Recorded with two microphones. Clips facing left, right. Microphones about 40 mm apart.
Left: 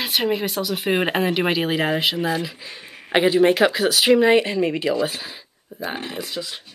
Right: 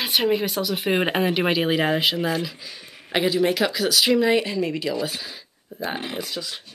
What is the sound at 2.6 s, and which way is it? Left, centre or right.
Speech, left.